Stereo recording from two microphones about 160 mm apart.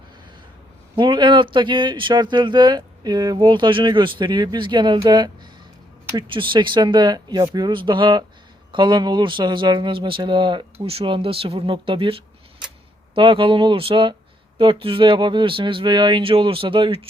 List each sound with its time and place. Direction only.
0.9 s speech: 30° right (ahead or behind)